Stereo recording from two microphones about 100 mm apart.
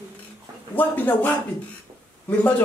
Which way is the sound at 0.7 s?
20° left (ahead or behind).